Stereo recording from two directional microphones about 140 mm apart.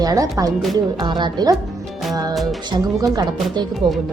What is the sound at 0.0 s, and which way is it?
A woman's voice, 25° right (ahead or behind).